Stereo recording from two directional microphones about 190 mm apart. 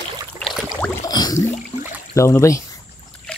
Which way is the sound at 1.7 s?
35° left (ahead or behind).